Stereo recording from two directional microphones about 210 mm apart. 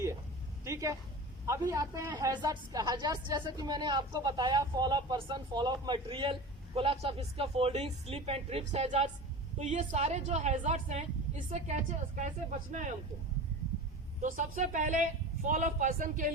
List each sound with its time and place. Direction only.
0.6 s a sound: 15° right (ahead or behind)
1.5 s a woman's voice: 15° right (ahead or behind); by 12.9 s 35° right (ahead or behind)
14.2 s a woman's voice: 40° right (ahead or behind)